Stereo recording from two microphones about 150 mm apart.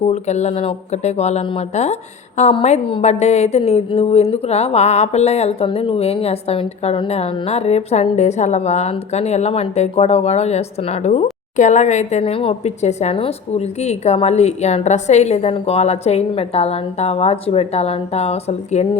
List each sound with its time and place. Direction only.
0.1 s a woman's voice: 50° left (ahead or behind)